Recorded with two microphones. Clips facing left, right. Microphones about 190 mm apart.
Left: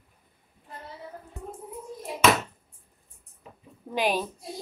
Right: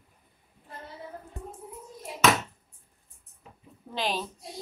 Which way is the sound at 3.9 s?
15° left (ahead or behind).